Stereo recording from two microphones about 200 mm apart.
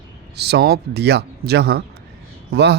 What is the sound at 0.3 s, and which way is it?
Speech, 55° right (ahead or behind).